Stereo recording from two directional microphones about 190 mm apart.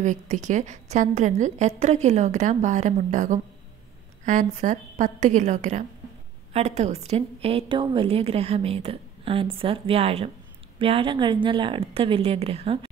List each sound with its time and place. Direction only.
0.0 s a woman's voice: 40° right (ahead or behind)